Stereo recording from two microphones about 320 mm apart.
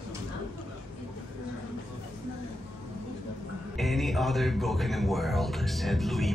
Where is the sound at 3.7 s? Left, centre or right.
Centre.